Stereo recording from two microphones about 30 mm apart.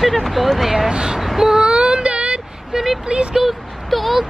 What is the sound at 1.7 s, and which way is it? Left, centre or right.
Child singing, right.